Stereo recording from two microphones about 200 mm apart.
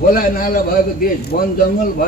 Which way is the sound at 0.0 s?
45° left (ahead or behind).